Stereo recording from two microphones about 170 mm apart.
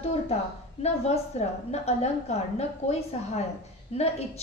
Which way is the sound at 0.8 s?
40° left (ahead or behind).